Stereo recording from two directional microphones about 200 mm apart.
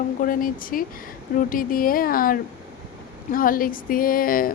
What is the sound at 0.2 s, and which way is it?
Speech, 45° left (ahead or behind).